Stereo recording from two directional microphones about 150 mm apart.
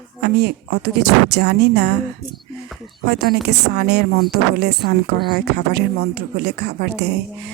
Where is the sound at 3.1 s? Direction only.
90° right.